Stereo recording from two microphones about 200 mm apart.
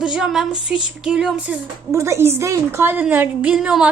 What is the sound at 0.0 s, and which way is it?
A woman's voice, 5° right (ahead or behind).